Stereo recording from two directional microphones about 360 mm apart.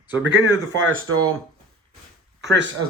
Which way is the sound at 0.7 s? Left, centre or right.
Right.